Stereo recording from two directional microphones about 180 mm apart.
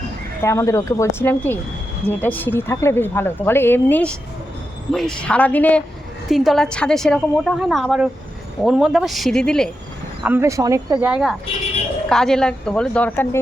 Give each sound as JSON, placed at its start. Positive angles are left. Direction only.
{"t": 0.4, "sound": "a woman's voice", "side_deg": 15}
{"t": 10.2, "sound": "speech", "side_deg": -15}
{"t": 11.0, "sound": "a woman's voice", "side_deg": -5}